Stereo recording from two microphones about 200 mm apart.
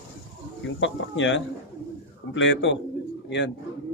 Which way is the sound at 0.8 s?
70° left (ahead or behind).